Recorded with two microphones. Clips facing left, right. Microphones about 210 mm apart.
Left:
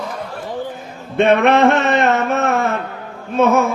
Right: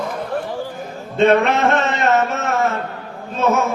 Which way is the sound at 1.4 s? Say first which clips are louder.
Left 5 dB; 60° left (ahead or behind).